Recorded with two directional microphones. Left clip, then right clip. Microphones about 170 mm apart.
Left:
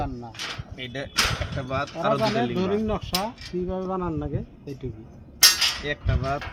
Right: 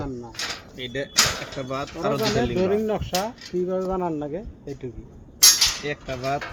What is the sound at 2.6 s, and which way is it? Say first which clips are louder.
Speech: right 3 dB; 50° left (ahead or behind).